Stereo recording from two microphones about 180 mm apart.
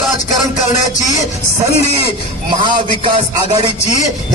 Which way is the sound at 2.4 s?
25° right (ahead or behind).